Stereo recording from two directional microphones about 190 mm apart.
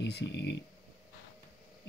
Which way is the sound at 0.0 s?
65° left (ahead or behind).